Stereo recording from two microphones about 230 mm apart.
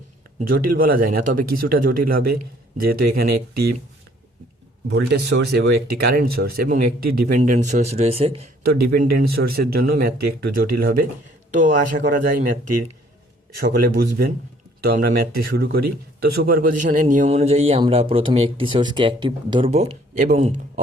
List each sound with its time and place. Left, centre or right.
0.3 s speech: right
4.9 s speech: right
8.6 s speech: right
12.0 s speech: right